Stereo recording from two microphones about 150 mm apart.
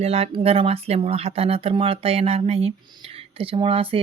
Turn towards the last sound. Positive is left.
turn(degrees=-35)  # may be behind; listen again after turning